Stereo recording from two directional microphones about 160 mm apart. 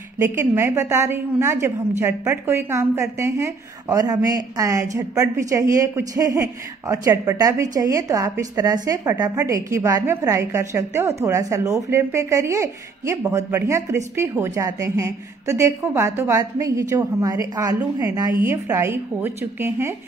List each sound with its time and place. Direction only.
0.2 s a woman's voice: 15° right (ahead or behind)